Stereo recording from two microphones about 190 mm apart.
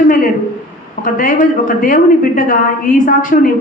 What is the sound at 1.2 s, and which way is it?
A woman's voice, 45° left (ahead or behind).